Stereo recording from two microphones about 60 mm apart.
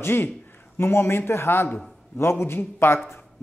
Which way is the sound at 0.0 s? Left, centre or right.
Left.